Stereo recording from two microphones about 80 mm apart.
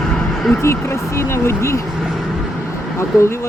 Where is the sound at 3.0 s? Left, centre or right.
Left.